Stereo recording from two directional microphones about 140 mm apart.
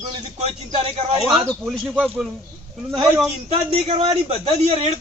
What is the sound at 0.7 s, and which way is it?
Speech, 50° right (ahead or behind).